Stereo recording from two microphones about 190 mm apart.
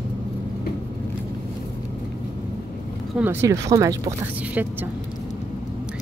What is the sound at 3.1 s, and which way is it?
Speech, 10° right (ahead or behind).